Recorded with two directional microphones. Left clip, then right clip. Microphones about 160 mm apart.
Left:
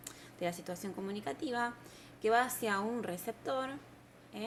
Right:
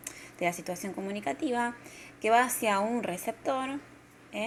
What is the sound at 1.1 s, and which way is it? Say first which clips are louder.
A woman's voice: right 8 dB; 10° right (ahead or behind).